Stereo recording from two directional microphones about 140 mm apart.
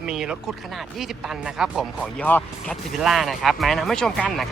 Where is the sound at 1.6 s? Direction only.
5° right (ahead or behind).